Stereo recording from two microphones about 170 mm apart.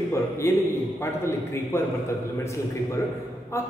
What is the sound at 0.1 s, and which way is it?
A man's voice, 15° left (ahead or behind).